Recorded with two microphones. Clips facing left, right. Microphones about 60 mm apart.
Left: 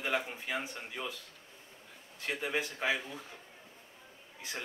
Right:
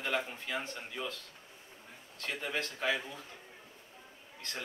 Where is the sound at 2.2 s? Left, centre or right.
Centre.